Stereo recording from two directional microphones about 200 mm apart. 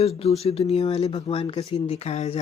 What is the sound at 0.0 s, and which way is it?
Speech, 30° left (ahead or behind).